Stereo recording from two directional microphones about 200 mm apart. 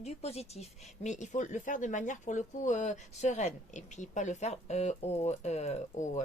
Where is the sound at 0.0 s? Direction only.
30° left (ahead or behind).